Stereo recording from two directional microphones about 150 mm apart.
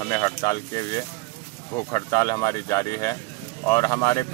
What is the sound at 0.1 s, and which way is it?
Speech, 25° left (ahead or behind).